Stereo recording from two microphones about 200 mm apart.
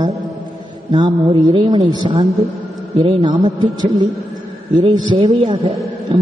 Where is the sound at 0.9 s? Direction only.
25° right (ahead or behind).